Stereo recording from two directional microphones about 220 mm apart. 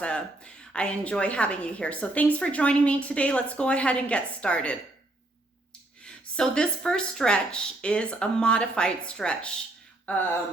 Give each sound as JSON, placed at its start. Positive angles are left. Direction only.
{"t": 0.0, "sound": "a woman's voice", "side_deg": 5}
{"t": 6.1, "sound": "a woman's voice", "side_deg": 5}